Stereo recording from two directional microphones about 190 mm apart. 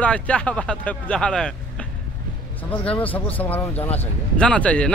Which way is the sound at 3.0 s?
10° left (ahead or behind).